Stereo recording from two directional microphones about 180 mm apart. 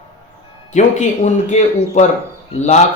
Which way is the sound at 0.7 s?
40° left (ahead or behind).